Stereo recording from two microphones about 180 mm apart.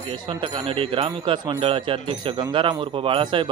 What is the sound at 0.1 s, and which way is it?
Speech, 30° right (ahead or behind).